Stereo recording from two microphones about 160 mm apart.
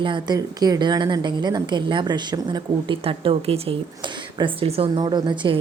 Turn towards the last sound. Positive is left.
turn(degrees=-30)  # may be behind; listen again after turning